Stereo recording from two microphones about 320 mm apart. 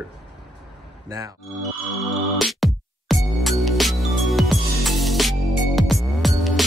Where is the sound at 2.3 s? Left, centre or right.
Centre.